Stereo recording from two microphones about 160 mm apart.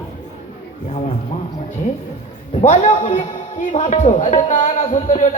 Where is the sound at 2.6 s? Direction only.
45° left (ahead or behind).